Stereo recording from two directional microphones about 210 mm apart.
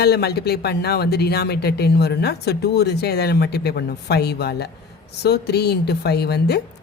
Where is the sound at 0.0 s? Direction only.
50° left (ahead or behind).